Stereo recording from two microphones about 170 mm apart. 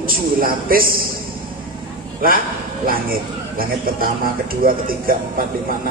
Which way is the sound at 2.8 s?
60° right (ahead or behind).